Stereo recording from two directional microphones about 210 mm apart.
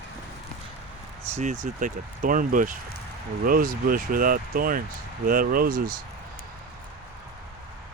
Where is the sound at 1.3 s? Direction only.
35° right (ahead or behind).